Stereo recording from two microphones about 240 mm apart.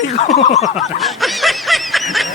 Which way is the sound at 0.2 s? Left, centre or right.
Left.